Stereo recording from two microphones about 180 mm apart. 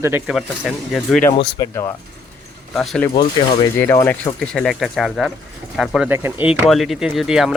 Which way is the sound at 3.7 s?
15° left (ahead or behind).